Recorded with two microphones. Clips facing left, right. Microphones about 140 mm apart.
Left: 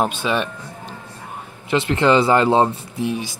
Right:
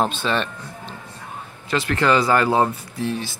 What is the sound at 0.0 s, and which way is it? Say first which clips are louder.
Speech: left 1 dB; 10° left (ahead or behind).